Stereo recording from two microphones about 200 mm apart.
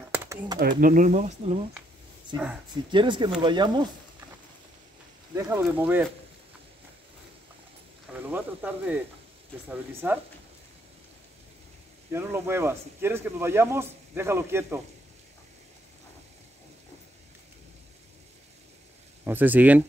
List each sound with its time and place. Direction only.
0.1 s typing: 10° right (ahead or behind)
0.6 s speech: 45° right (ahead or behind)
2.7 s speech: 25° right (ahead or behind)
5.3 s speech: 15° right (ahead or behind)
8.1 s speech: 5° right (ahead or behind)
12.1 s speech: 10° right (ahead or behind)
19.2 s speech: 10° right (ahead or behind)